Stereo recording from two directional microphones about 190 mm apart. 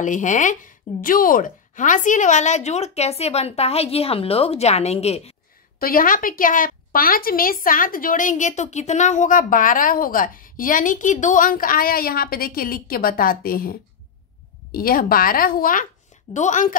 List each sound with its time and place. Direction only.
0.0 s speech: 40° left (ahead or behind)
5.8 s a woman's voice: 50° left (ahead or behind)